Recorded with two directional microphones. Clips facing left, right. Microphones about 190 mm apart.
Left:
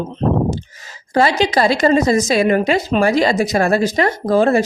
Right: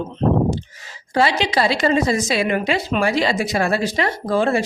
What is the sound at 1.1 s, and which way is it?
Speech, 45° left (ahead or behind).